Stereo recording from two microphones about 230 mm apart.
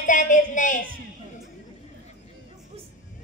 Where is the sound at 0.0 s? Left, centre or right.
Left.